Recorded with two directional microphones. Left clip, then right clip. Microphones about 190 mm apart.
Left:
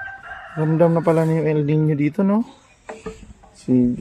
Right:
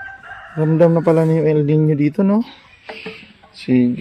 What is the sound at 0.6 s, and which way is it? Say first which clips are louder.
Speech: right 4 dB; centre (ahead or behind).